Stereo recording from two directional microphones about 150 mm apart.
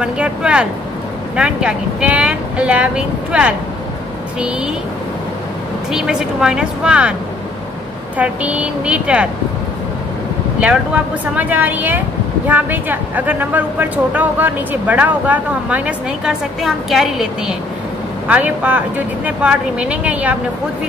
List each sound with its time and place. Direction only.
0.0 s speech: 5° right (ahead or behind)
5.9 s speech: 5° right (ahead or behind)
8.2 s speech: 10° right (ahead or behind)
11.3 s speech: 10° right (ahead or behind)